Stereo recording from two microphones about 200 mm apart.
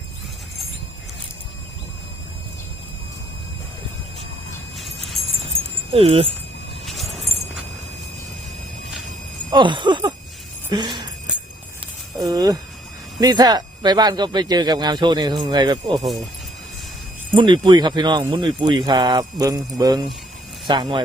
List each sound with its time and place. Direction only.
5.2 s music: centre (ahead or behind)
5.9 s speech: 25° right (ahead or behind)
6.8 s a sound: centre (ahead or behind)
9.5 s speech: 25° right (ahead or behind)
12.2 s speech: 20° right (ahead or behind)
17.3 s speech: 25° right (ahead or behind)